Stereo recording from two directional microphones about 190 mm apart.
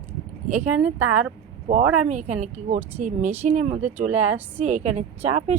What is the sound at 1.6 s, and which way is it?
Speech, 40° right (ahead or behind).